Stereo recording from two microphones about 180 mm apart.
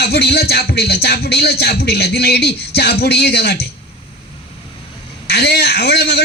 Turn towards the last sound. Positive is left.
turn(degrees=65)  # may be behind; listen again after turning